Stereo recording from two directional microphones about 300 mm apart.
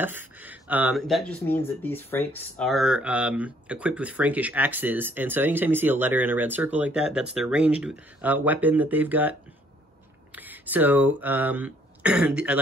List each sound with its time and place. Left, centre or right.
0.0 s speech: centre